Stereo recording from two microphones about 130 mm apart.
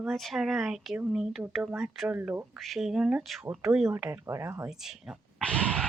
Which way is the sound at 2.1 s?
15° right (ahead or behind).